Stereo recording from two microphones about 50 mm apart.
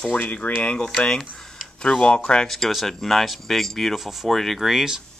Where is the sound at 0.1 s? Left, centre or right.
Left.